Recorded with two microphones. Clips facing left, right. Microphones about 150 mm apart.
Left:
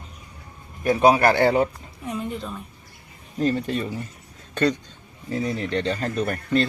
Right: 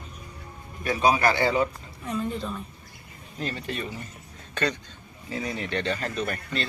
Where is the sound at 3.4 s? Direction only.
40° left (ahead or behind).